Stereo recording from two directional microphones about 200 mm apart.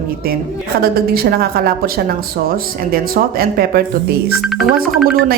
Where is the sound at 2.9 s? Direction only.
50° right (ahead or behind).